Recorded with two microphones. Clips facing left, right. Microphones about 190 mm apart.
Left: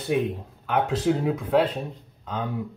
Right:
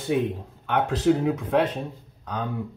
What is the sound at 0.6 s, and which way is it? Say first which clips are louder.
Speech: right 1 dB; centre (ahead or behind).